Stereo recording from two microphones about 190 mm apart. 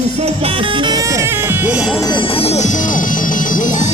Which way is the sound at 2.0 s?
25° left (ahead or behind).